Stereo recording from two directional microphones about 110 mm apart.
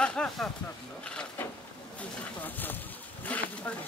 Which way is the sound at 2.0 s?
15° left (ahead or behind).